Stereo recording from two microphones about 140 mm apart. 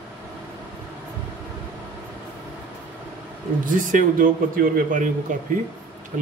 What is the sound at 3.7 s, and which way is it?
Speech, 70° right (ahead or behind).